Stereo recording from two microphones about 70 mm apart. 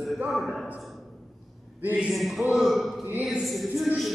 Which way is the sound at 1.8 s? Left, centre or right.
Right.